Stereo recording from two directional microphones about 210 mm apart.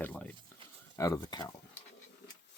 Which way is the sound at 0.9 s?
15° left (ahead or behind).